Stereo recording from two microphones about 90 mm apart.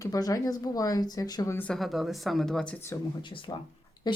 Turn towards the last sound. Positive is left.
turn(degrees=55)  # may be behind; listen again after turning